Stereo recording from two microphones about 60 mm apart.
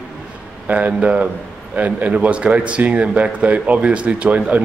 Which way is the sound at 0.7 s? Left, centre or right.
Right.